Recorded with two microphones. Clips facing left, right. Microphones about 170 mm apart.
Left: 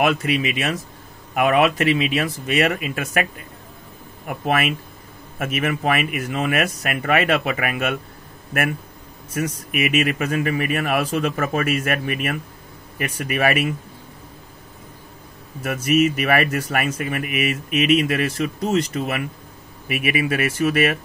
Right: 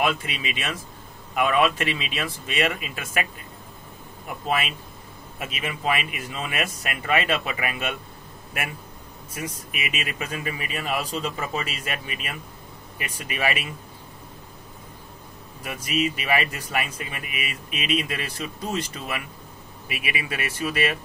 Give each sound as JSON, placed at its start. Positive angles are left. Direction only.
{"t": 0.1, "sound": "speech", "side_deg": 50}
{"t": 4.3, "sound": "speech", "side_deg": 55}
{"t": 6.2, "sound": "speech", "side_deg": 65}
{"t": 6.6, "sound": "speech", "side_deg": 45}
{"t": 15.7, "sound": "speech", "side_deg": 60}
{"t": 17.7, "sound": "speech", "side_deg": 65}
{"t": 20.2, "sound": "speech", "side_deg": 50}